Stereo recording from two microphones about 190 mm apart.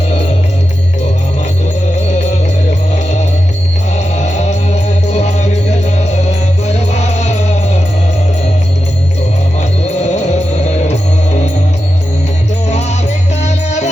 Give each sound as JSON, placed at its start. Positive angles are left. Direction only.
{"t": 2.0, "sound": "music", "side_deg": 35}
{"t": 9.6, "sound": "music", "side_deg": 40}
{"t": 13.4, "sound": "music", "side_deg": 35}